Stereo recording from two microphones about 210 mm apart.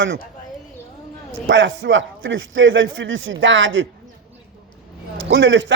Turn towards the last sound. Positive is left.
turn(degrees=-60)  # may be behind; listen again after turning